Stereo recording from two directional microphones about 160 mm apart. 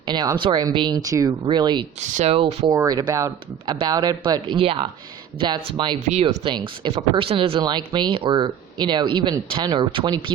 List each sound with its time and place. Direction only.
0.1 s speech: 25° right (ahead or behind)
2.0 s speech: 50° right (ahead or behind)
2.3 s speech: 40° right (ahead or behind)
2.7 s speech: 25° right (ahead or behind)